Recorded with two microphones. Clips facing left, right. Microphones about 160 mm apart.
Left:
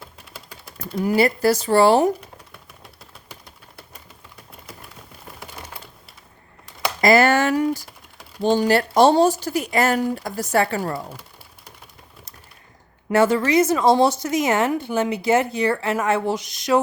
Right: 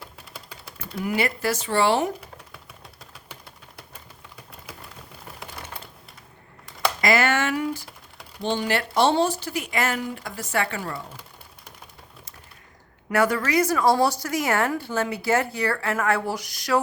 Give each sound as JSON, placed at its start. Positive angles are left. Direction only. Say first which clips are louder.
{"t": 0.9, "sound": "speech", "louder": "left 7 dB", "side_deg": 35}
{"t": 7.0, "sound": "a sound", "louder": "left 7 dB", "side_deg": 35}
{"t": 8.4, "sound": "speech", "louder": "left 7 dB", "side_deg": 40}
{"t": 13.1, "sound": "speech", "louder": "left 5 dB", "side_deg": 25}